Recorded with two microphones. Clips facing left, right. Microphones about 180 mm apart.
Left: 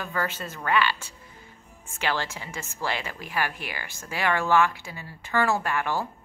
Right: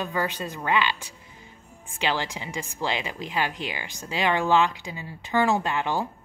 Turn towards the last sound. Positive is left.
turn(degrees=-20)  # may be behind; listen again after turning